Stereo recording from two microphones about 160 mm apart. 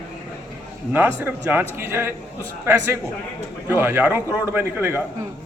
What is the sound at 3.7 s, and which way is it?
A man's voice, 15° right (ahead or behind).